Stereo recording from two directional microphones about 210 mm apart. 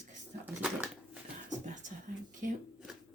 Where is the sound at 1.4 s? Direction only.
35° right (ahead or behind).